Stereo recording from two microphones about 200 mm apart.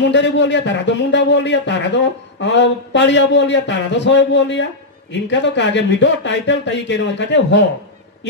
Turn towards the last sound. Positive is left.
turn(degrees=60)  # may be behind; listen again after turning